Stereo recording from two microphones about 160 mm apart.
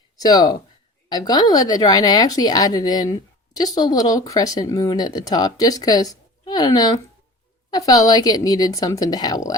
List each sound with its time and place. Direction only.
0.2 s speech: 25° left (ahead or behind)